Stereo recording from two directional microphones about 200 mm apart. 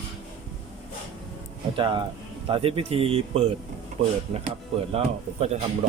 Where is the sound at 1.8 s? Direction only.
25° right (ahead or behind).